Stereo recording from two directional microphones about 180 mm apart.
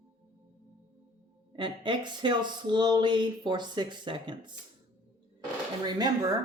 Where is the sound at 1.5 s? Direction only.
25° right (ahead or behind).